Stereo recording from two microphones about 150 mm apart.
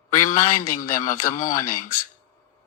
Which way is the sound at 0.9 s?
65° left (ahead or behind).